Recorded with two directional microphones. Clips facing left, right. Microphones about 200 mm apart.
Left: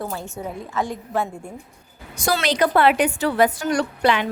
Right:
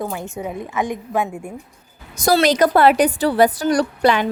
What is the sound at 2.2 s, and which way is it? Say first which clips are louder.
A woman's voice: right 5 dB; 40° right (ahead or behind).